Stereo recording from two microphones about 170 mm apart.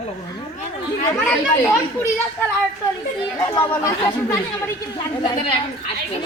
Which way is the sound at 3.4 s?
15° left (ahead or behind).